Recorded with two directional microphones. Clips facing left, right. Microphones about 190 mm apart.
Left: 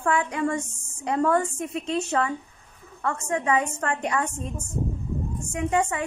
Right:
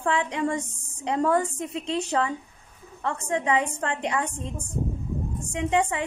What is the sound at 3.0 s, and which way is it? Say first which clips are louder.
A woman's voice: left 1 dB; 15° right (ahead or behind).